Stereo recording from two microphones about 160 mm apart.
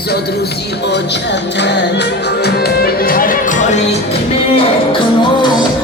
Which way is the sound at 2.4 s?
80° left.